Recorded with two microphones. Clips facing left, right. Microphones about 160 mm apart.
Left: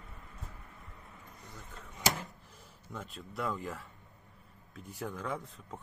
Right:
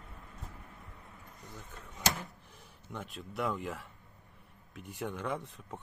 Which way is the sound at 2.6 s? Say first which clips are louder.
Right 1 dB; centre (ahead or behind).